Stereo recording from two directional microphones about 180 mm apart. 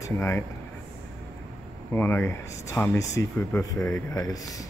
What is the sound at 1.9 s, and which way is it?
Speech, 10° left (ahead or behind).